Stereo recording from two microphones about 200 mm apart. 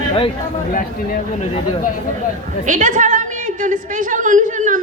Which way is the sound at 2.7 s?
40° right (ahead or behind).